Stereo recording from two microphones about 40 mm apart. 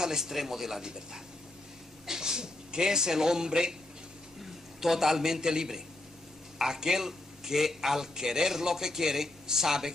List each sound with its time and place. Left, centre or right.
0.0 s a man's voice: centre
2.0 s a man's voice: centre